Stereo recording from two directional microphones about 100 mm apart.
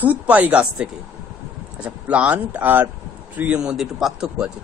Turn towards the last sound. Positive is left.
turn(degrees=-5)  # may be behind; listen again after turning